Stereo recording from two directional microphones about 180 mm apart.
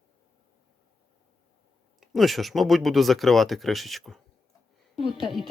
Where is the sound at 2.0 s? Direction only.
Centre (ahead or behind).